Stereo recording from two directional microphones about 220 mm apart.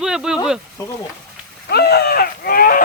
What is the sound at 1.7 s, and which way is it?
Speech, 45° left (ahead or behind).